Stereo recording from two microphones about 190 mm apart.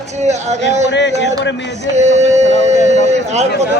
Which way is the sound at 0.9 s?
65° left (ahead or behind).